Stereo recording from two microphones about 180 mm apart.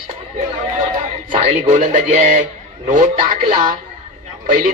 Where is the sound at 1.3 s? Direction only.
40° right (ahead or behind).